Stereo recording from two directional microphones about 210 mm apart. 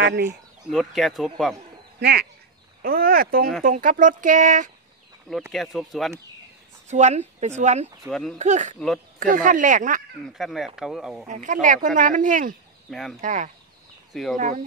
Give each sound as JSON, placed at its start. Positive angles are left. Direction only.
{"t": 0.7, "sound": "speech", "side_deg": 0}
{"t": 2.0, "sound": "speech", "side_deg": -50}
{"t": 5.5, "sound": "speech", "side_deg": 0}
{"t": 6.9, "sound": "speech", "side_deg": -35}
{"t": 8.1, "sound": "speech", "side_deg": 0}
{"t": 8.4, "sound": "speech", "side_deg": -35}
{"t": 8.7, "sound": "speech", "side_deg": 0}
{"t": 9.2, "sound": "speech", "side_deg": -40}
{"t": 10.2, "sound": "speech", "side_deg": 0}
{"t": 11.2, "sound": "speech", "side_deg": -35}
{"t": 12.9, "sound": "speech", "side_deg": 0}
{"t": 13.2, "sound": "speech", "side_deg": -35}